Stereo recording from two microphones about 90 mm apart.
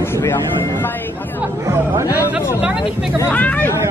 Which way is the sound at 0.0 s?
30° left (ahead or behind).